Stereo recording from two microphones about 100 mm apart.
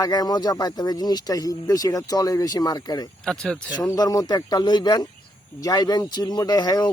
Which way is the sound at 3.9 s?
35° left (ahead or behind).